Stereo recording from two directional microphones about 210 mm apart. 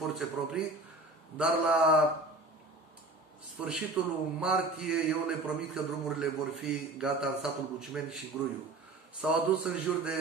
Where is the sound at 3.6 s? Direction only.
5° right (ahead or behind).